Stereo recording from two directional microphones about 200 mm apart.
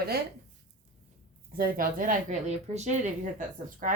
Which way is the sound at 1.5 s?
45° right (ahead or behind).